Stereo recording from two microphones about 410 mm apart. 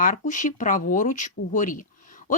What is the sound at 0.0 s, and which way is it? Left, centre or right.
Speech, centre.